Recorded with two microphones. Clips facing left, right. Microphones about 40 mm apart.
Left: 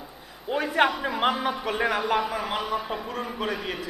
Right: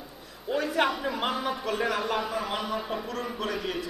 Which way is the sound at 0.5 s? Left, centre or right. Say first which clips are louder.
Left 3 dB; left.